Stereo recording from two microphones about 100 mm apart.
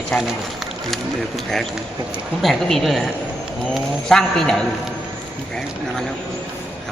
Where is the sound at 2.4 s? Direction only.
Centre (ahead or behind).